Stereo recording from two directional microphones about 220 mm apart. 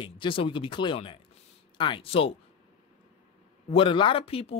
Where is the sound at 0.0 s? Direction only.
25° left (ahead or behind).